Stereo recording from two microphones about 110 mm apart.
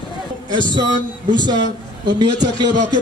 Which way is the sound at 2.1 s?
40° right (ahead or behind).